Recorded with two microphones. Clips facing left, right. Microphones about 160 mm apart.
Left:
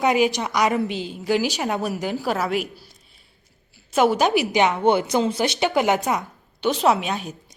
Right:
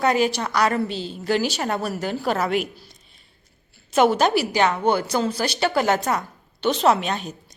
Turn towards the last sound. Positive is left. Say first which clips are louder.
# even
turn(degrees=10)  # may be behind; listen again after turning